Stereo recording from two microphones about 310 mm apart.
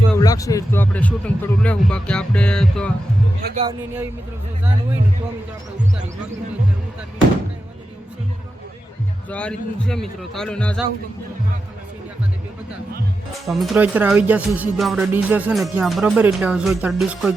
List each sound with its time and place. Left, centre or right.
0.2 s speech: centre
3.4 s speech: right
9.3 s speech: centre
13.5 s speech: centre